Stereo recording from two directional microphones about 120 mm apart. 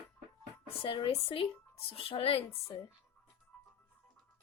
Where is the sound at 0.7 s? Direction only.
50° left (ahead or behind).